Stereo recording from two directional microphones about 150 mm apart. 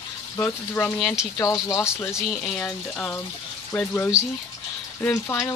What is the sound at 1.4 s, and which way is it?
Speech, 25° left (ahead or behind).